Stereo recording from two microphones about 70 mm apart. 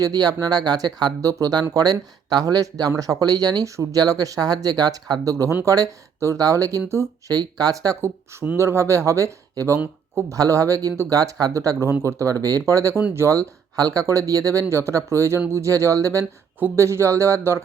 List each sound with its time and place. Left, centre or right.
0.0 s speech: right
1.2 s speech: right
1.7 s speech: right
7.3 s speech: right
8.0 s speech: right
10.3 s speech: right
11.5 s speech: right
13.7 s speech: right
14.1 s speech: right